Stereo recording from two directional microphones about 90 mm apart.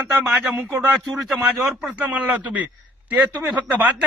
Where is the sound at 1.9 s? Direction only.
15° right (ahead or behind).